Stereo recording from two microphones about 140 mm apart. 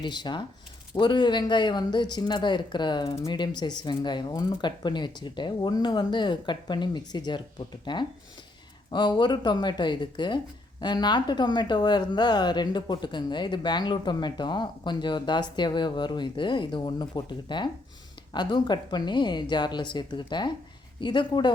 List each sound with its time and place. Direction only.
0.0 s speech: 35° left (ahead or behind)